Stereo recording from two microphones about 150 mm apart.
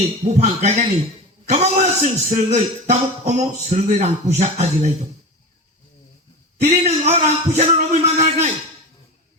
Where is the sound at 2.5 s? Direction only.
50° right (ahead or behind).